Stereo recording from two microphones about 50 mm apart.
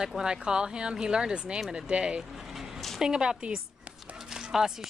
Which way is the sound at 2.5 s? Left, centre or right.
Centre.